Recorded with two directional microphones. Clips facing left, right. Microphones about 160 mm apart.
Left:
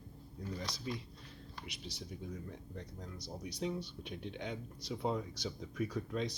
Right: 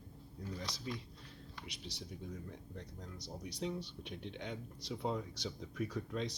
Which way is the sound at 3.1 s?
45° left (ahead or behind).